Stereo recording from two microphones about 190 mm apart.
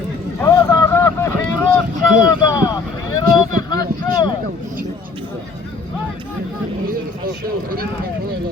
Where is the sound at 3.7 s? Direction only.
20° left (ahead or behind).